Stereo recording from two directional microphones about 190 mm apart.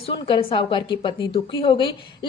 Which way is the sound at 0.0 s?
30° left (ahead or behind).